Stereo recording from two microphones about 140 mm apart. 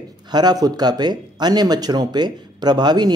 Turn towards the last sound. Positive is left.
turn(degrees=-30)  # may be behind; listen again after turning